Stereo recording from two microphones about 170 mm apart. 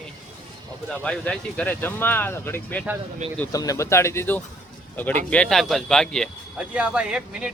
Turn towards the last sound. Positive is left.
turn(degrees=-5)  # may be behind; listen again after turning